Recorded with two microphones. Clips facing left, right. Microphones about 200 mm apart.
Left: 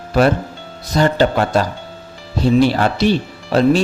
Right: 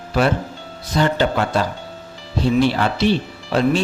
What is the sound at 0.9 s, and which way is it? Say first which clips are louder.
Speech: left 3 dB; 40° left (ahead or behind).